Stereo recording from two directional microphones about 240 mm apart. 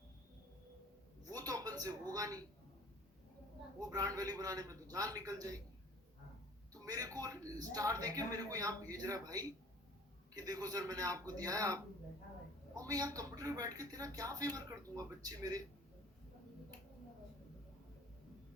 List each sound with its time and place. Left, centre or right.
1.5 s a sound: centre
3.8 s a man's voice: centre
6.8 s a man's voice: centre